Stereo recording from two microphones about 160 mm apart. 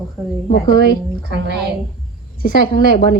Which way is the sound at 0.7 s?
85° right.